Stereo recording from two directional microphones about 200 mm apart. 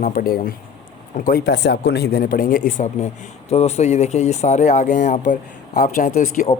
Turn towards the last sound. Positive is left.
turn(degrees=40)  # may be behind; listen again after turning